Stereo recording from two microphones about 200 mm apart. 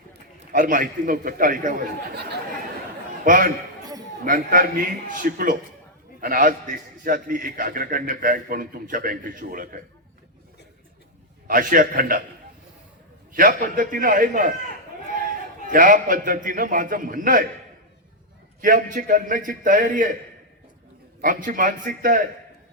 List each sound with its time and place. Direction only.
0.5 s a man's voice: 45° right (ahead or behind)
3.2 s a man's voice: 45° right (ahead or behind)
11.4 s a man's voice: 45° right (ahead or behind)
13.3 s a man's voice: 45° right (ahead or behind)
15.6 s a man's voice: 45° right (ahead or behind)
18.6 s a man's voice: 40° right (ahead or behind)
21.2 s a man's voice: 45° right (ahead or behind)